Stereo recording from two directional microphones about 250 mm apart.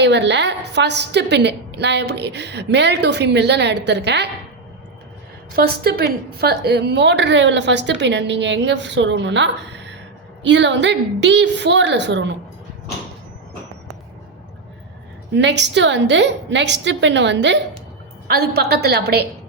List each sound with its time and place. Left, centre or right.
0.0 s a woman's voice: right
5.5 s a woman's voice: right
15.4 s a woman's voice: right